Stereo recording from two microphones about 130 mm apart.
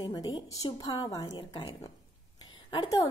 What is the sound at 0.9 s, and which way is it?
Speech, 40° left (ahead or behind).